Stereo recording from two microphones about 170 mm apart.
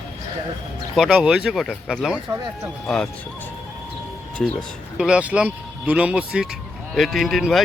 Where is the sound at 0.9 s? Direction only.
5° right (ahead or behind).